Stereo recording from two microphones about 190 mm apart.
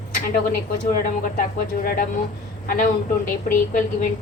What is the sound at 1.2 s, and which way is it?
A woman's voice, 50° left (ahead or behind).